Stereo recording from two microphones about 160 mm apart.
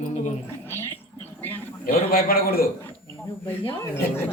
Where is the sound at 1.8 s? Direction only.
65° left (ahead or behind).